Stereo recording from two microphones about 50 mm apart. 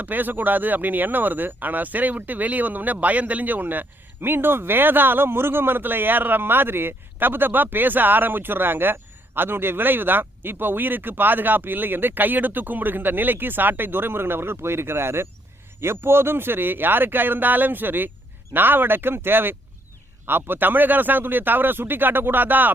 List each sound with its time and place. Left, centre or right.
0.0 s speech: right